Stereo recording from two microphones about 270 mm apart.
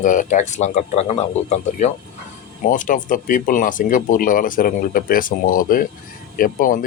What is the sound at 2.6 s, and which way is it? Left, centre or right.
Speech, left.